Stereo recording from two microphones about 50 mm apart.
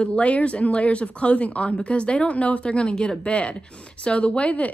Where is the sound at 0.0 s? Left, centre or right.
Left.